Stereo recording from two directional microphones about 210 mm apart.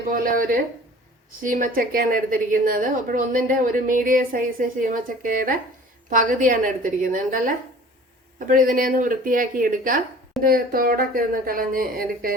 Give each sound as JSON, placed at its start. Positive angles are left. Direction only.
{"t": 0.1, "sound": "a woman's voice", "side_deg": -40}